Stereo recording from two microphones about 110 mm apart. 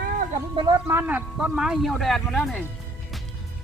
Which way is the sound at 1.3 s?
5° right (ahead or behind).